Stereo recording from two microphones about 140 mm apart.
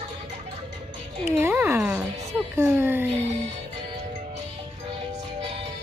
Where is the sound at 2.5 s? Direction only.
15° right (ahead or behind).